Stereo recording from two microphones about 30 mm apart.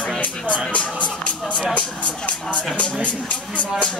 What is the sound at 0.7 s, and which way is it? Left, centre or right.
Speech, left.